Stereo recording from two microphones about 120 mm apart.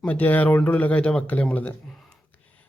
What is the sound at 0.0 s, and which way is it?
Speech, 15° left (ahead or behind).